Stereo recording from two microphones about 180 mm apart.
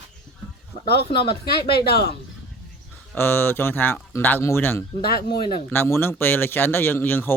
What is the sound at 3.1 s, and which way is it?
Speech, 10° left (ahead or behind).